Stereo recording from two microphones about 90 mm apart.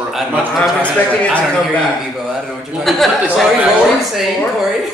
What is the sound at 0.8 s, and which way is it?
Speech, 15° left (ahead or behind).